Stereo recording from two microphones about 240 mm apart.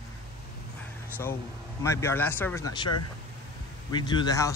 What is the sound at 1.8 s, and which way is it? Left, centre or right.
Speech, centre.